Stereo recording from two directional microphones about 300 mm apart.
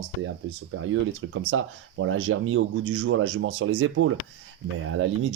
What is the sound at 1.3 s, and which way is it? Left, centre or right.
Speech, right.